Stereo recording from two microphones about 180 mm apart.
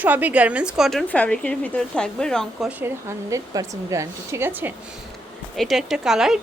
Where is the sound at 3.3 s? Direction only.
15° right (ahead or behind).